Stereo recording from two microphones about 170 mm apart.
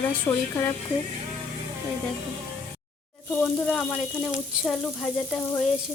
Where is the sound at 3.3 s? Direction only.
10° left (ahead or behind).